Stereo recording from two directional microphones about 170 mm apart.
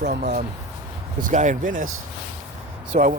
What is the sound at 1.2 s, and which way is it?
Speech, 45° right (ahead or behind).